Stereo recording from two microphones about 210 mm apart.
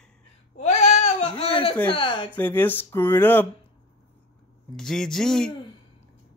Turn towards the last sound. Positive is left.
turn(degrees=0)  # may be behind; listen again after turning